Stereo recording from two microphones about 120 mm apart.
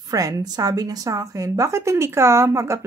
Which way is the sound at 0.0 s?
30° right (ahead or behind).